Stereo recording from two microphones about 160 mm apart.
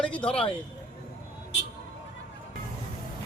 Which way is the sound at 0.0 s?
5° left (ahead or behind).